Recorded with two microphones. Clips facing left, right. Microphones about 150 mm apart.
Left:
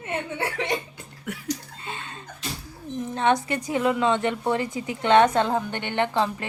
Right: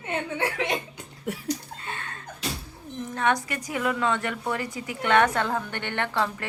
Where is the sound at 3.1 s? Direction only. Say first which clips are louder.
Left 3 dB; 25° left (ahead or behind).